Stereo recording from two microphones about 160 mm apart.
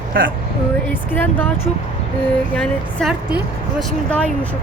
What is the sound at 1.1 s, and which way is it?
Speech, 10° left (ahead or behind).